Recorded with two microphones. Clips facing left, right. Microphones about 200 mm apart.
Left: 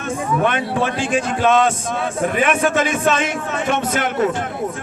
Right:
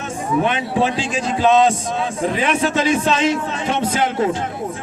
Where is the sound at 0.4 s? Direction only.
55° left (ahead or behind).